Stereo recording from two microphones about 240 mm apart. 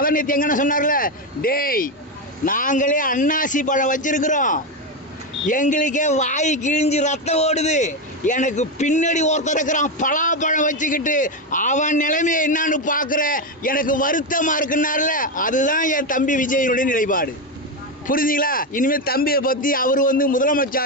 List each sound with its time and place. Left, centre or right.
0.0 s a man's voice: left